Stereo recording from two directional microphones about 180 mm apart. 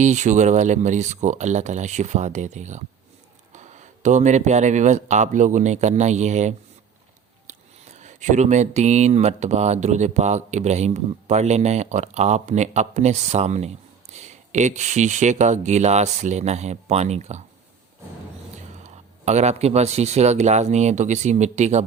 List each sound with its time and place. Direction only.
0.0 s speech: 40° right (ahead or behind)
18.8 s speech: 40° right (ahead or behind)